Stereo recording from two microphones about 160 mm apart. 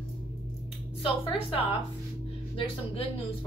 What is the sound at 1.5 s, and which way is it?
Speech, 35° left (ahead or behind).